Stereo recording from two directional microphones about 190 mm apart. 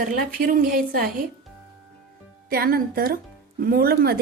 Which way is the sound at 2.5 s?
50° right (ahead or behind).